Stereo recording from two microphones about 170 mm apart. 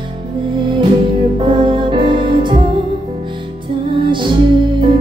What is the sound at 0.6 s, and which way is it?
Music, 30° right (ahead or behind).